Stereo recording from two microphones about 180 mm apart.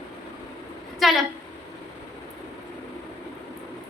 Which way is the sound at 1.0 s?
Centre (ahead or behind).